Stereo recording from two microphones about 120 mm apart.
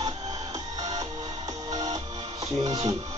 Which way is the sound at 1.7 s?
35° right (ahead or behind).